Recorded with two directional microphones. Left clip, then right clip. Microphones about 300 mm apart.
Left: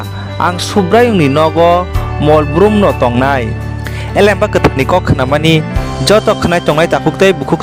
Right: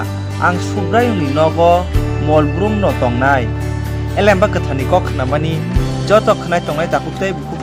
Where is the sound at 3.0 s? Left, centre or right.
Left.